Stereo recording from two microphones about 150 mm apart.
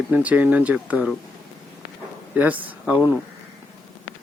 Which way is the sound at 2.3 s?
10° right (ahead or behind).